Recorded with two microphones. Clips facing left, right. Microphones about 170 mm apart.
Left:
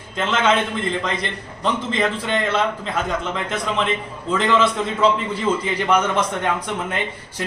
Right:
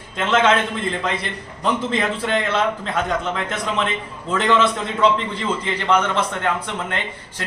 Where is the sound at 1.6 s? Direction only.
Centre (ahead or behind).